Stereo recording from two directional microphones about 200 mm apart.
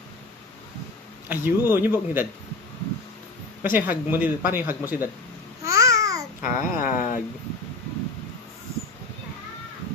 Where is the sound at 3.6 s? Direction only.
10° right (ahead or behind).